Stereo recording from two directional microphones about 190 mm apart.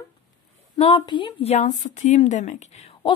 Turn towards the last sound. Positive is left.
turn(degrees=35)  # may be behind; listen again after turning